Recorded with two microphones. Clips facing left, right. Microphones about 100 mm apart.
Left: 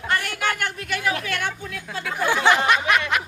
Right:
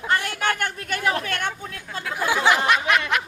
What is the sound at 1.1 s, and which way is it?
Vehicle, 40° right (ahead or behind).